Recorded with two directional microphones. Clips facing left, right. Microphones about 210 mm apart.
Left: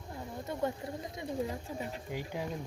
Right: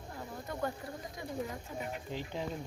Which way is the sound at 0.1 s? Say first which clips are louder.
Left 3 dB; 25° left (ahead or behind).